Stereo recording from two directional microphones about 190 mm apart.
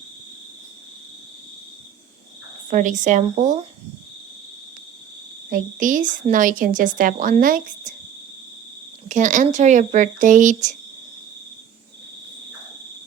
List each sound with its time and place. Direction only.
2.6 s speech: 40° right (ahead or behind)
5.5 s a woman's voice: 45° right (ahead or behind)
9.0 s speech: 40° right (ahead or behind)